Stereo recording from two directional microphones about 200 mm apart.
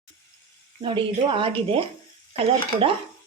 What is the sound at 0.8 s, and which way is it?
Speech, 25° right (ahead or behind).